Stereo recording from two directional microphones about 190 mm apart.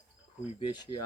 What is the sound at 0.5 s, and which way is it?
Speech, 25° left (ahead or behind).